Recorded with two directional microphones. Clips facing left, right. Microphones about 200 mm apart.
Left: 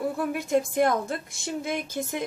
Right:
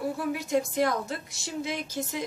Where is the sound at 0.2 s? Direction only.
55° left (ahead or behind).